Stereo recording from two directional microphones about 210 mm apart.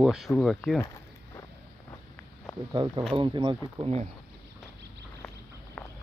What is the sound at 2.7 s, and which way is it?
Speech, 20° right (ahead or behind).